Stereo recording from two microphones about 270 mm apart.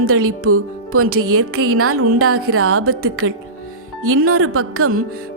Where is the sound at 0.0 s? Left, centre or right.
Right.